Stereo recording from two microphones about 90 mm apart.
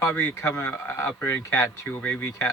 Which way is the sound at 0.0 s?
30° left (ahead or behind).